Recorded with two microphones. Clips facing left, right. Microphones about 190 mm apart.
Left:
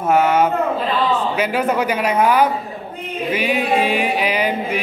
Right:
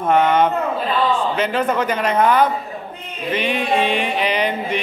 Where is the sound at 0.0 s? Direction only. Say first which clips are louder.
Even; 5° left (ahead or behind).